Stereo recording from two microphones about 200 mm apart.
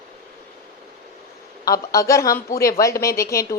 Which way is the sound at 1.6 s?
15° left (ahead or behind).